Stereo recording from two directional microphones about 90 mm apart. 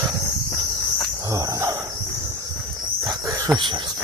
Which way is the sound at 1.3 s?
35° right (ahead or behind).